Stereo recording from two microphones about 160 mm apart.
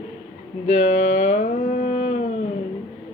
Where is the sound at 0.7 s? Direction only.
45° left (ahead or behind).